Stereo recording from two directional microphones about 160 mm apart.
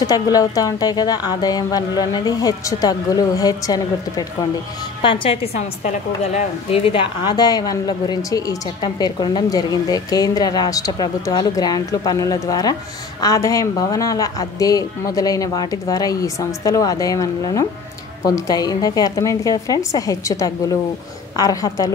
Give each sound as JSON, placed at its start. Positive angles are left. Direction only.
{"t": 0.0, "sound": "a woman's voice", "side_deg": 25}
{"t": 5.0, "sound": "a woman's voice", "side_deg": 35}